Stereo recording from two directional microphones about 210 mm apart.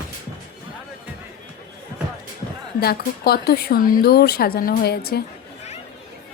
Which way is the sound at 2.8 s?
50° left (ahead or behind).